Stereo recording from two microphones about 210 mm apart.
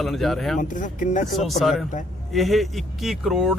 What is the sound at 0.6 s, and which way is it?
Speech, 40° left (ahead or behind).